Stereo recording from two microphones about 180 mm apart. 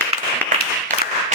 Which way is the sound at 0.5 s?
45° right (ahead or behind).